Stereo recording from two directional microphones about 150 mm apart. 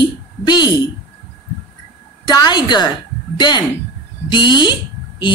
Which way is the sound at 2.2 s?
30° left (ahead or behind).